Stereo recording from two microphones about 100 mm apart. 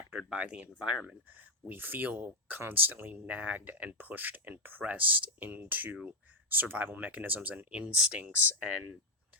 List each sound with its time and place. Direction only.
0.1 s speech: 10° right (ahead or behind)